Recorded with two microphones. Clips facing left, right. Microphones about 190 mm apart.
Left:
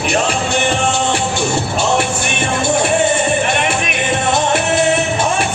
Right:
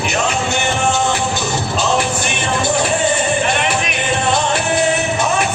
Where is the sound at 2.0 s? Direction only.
25° left (ahead or behind).